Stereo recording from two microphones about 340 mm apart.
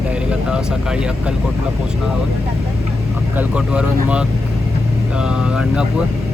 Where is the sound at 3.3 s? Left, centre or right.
Centre.